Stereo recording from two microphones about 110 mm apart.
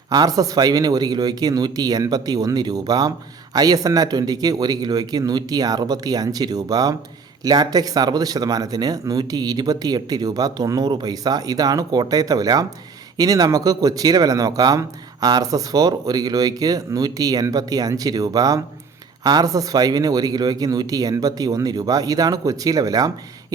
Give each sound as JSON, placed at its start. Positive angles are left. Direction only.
{"t": 0.1, "sound": "speech", "side_deg": -35}